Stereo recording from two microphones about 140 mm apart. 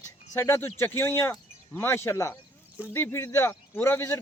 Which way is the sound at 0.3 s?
15° left (ahead or behind).